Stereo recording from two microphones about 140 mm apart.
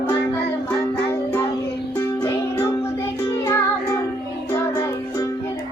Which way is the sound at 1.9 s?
15° left (ahead or behind).